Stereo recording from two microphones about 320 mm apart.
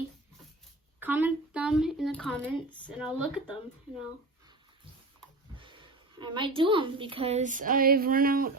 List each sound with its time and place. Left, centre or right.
0.9 s speech: centre
5.5 s a woman's voice: centre